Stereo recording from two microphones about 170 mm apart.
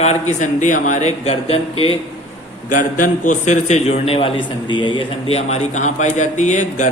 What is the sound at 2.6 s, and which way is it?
A man's voice, 50° left (ahead or behind).